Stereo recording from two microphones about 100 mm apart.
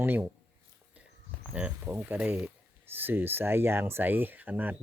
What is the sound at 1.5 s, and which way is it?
Speech, 15° right (ahead or behind).